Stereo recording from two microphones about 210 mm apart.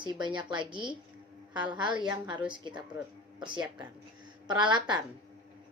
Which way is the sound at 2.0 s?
20° right (ahead or behind).